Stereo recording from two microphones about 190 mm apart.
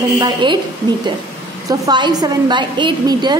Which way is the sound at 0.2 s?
25° right (ahead or behind).